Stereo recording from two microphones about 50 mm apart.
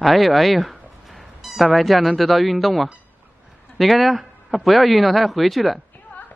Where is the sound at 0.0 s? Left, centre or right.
Centre.